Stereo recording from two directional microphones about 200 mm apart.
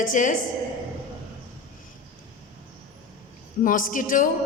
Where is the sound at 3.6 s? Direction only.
40° left (ahead or behind).